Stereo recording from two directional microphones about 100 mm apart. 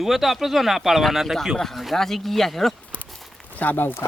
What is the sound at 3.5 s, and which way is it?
Speech, 15° left (ahead or behind).